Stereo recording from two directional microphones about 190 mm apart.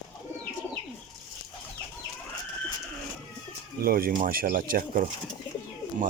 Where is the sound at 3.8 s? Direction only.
50° right (ahead or behind).